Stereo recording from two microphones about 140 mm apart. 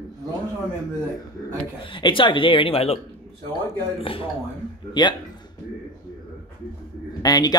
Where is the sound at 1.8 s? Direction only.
35° left (ahead or behind).